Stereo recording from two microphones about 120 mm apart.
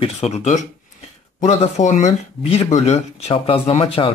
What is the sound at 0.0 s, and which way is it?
Speech, 65° left (ahead or behind).